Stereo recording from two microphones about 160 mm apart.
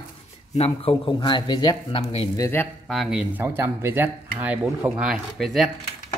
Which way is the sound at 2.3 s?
15° left (ahead or behind).